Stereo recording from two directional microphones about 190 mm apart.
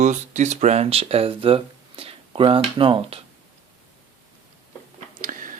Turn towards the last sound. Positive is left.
turn(degrees=-45)  # may be behind; listen again after turning